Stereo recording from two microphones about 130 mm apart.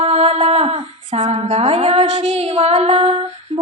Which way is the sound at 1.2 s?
55° right (ahead or behind).